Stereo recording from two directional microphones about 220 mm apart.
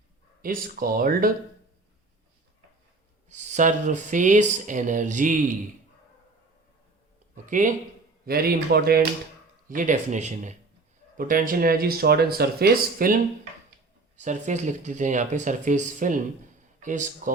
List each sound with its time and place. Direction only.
0.4 s speech: 40° right (ahead or behind)
3.2 s speech: 30° right (ahead or behind)
7.4 s speech: 35° right (ahead or behind)